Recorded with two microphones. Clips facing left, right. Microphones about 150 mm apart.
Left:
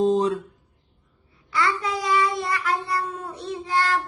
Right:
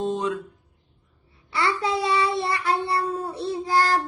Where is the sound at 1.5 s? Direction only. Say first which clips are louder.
Even; 30° right (ahead or behind).